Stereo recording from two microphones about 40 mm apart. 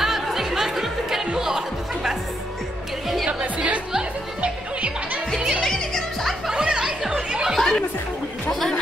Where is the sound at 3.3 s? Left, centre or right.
Right.